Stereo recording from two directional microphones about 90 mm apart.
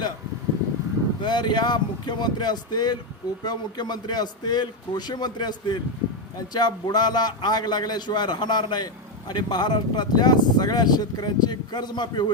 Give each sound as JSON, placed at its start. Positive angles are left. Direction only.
{"t": 1.2, "sound": "a man's voice", "side_deg": 55}